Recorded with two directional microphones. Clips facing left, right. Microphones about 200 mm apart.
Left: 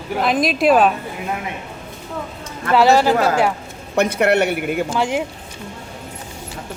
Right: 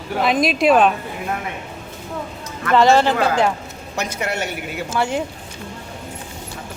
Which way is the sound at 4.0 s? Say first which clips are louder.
Left 9 dB; 60° left (ahead or behind).